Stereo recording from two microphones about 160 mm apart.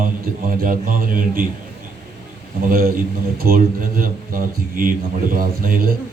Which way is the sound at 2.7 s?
65° right (ahead or behind).